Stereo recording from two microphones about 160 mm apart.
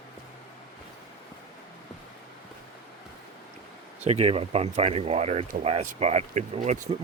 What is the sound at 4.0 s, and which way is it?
Speech, 40° right (ahead or behind).